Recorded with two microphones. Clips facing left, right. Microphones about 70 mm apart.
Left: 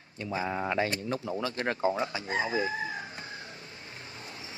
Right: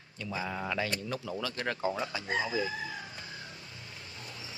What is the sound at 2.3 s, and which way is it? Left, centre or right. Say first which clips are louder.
Crowing: left 1 dB; left.